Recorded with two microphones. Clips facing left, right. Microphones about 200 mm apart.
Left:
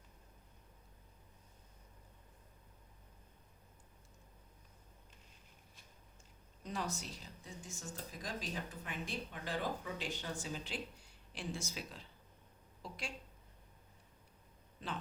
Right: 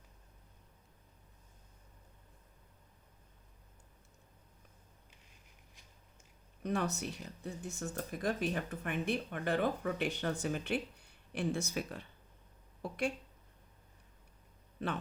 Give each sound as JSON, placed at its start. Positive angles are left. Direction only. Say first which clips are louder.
{"t": 6.6, "sound": "speech", "louder": "right 7 dB", "side_deg": -65}
{"t": 14.8, "sound": "speech", "louder": "right 7 dB", "side_deg": -60}